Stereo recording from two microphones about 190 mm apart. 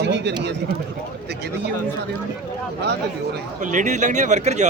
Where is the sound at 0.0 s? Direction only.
65° right (ahead or behind).